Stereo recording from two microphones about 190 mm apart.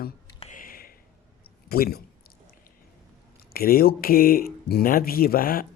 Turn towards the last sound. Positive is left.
turn(degrees=50)  # may be behind; listen again after turning